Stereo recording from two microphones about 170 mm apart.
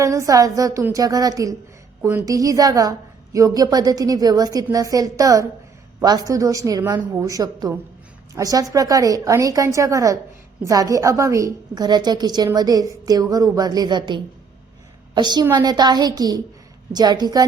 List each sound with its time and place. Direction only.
0.0 s a woman's voice: 20° right (ahead or behind)